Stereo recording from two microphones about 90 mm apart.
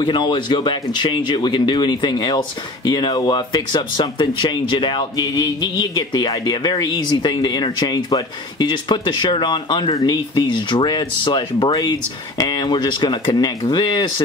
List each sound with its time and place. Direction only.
0.0 s speech: 65° left (ahead or behind)
9.9 s speech: 40° left (ahead or behind)
10.4 s speech: 60° left (ahead or behind)
11.7 s speech: 50° left (ahead or behind)